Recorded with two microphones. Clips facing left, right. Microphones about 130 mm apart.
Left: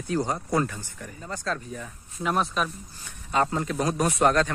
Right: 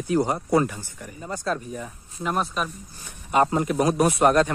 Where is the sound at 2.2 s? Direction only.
Centre (ahead or behind).